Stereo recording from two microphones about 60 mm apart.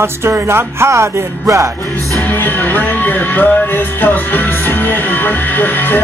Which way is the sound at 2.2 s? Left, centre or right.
Left.